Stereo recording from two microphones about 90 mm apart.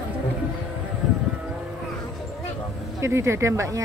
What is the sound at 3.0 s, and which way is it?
Speech, 30° right (ahead or behind).